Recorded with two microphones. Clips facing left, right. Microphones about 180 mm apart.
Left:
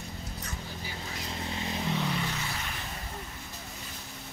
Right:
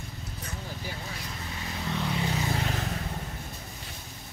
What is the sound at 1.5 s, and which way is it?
Vehicle, 20° left (ahead or behind).